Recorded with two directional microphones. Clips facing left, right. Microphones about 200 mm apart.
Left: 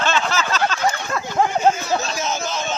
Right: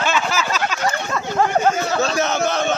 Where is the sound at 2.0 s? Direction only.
65° right (ahead or behind).